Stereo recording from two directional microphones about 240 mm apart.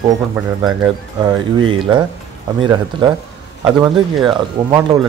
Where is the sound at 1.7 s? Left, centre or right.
Centre.